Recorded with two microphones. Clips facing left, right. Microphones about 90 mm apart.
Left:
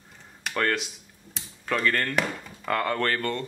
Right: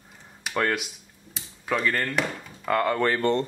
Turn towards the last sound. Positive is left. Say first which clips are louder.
# right 6 dB
turn(degrees=-30)  # may be behind; listen again after turning